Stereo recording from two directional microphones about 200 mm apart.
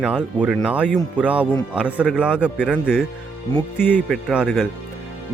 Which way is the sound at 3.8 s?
10° left (ahead or behind).